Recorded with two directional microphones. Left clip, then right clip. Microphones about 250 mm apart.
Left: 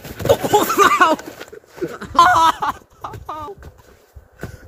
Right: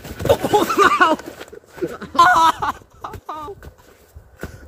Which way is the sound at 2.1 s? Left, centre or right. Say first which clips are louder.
Left 1 dB; centre.